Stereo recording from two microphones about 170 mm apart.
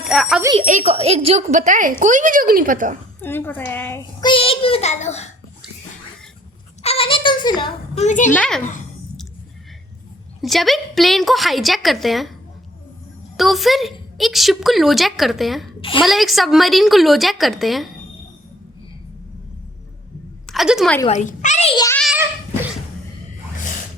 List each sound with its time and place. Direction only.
0.1 s a woman's voice: centre (ahead or behind)
0.5 s a woman's voice: 40° right (ahead or behind)
3.2 s a woman's voice: 10° left (ahead or behind)
4.2 s a child's voice: 30° left (ahead or behind)
6.8 s speech: 35° left (ahead or behind)
7.9 s speech: 45° left (ahead or behind)
8.3 s a woman's voice: 5° left (ahead or behind)
10.4 s a woman's voice: centre (ahead or behind)
13.3 s a woman's voice: centre (ahead or behind)
15.8 s a woman's voice: 30° left (ahead or behind)
16.0 s a woman's voice: centre (ahead or behind)
20.5 s a woman's voice: centre (ahead or behind)
21.1 s speech: 45° left (ahead or behind)
22.1 s a sound: 10° right (ahead or behind)